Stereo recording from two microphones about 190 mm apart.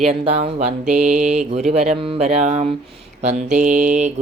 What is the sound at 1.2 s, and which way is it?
Speech, 35° right (ahead or behind).